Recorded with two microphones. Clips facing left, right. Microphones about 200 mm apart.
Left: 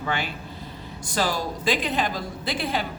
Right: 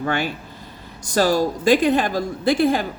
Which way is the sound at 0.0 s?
45° right (ahead or behind).